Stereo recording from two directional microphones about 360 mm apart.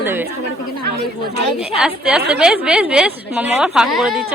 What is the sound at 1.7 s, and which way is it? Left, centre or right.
A woman's voice, centre.